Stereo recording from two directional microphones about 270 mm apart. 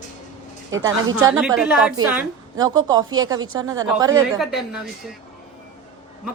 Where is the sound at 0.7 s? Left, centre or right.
Right.